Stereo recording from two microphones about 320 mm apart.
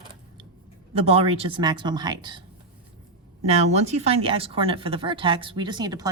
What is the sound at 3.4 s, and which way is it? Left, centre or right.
Speech, right.